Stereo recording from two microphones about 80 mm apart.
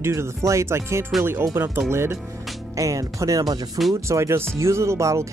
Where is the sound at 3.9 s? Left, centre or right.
Right.